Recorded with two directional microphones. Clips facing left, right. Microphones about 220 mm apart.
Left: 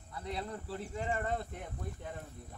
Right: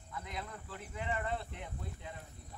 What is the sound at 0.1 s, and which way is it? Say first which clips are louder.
Speech: left 5 dB; 35° left (ahead or behind).